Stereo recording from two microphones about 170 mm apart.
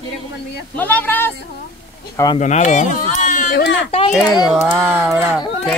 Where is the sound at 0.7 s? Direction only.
10° left (ahead or behind).